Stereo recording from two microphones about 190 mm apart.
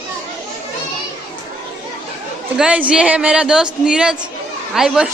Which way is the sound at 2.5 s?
5° right (ahead or behind).